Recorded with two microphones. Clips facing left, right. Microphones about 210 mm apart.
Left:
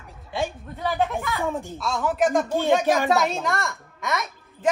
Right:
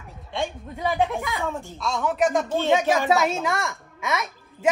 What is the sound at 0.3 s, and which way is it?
Speech, 5° left (ahead or behind).